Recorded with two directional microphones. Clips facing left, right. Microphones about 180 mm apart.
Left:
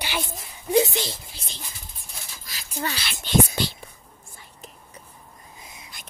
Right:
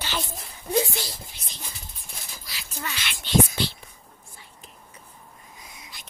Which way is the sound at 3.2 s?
45° left (ahead or behind).